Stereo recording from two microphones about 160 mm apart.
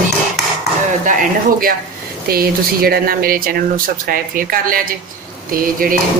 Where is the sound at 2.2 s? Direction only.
70° right (ahead or behind).